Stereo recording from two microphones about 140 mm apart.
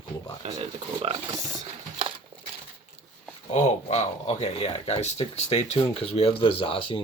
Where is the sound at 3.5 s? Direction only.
55° left (ahead or behind).